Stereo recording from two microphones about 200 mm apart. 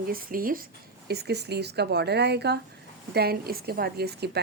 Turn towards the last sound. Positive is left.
turn(degrees=-55)  # may be behind; listen again after turning